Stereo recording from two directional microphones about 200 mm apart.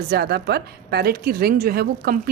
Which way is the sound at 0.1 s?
55° right (ahead or behind).